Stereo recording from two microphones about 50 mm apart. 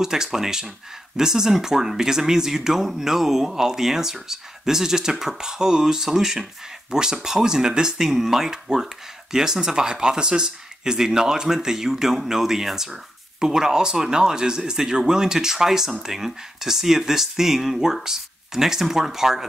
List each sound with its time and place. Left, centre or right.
0.0 s speech: centre